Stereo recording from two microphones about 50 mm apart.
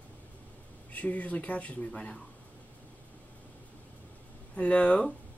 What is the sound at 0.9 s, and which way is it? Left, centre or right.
Speech, left.